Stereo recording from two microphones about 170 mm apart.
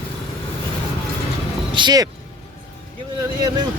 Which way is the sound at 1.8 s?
25° right (ahead or behind).